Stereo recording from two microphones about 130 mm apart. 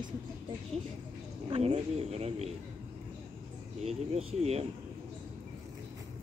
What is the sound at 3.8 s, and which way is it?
Speech, 50° right (ahead or behind).